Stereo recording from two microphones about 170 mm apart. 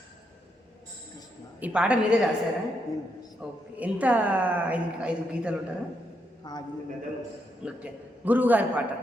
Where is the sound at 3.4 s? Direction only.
10° right (ahead or behind).